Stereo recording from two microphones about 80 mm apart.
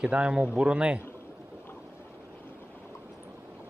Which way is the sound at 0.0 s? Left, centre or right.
Centre.